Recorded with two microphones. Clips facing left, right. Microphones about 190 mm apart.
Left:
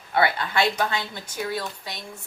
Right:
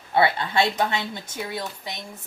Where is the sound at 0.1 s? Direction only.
25° right (ahead or behind).